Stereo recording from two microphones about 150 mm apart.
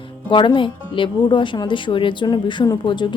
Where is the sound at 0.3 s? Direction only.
35° left (ahead or behind).